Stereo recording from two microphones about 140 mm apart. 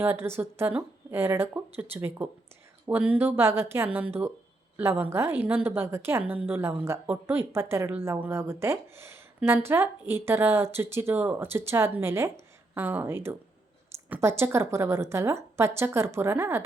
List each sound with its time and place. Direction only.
0.0 s a woman's voice: 15° right (ahead or behind)